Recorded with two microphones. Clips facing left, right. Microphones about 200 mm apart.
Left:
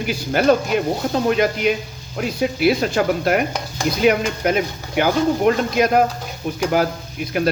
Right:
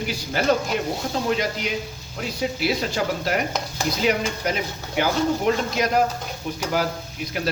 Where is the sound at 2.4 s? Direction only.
60° left (ahead or behind).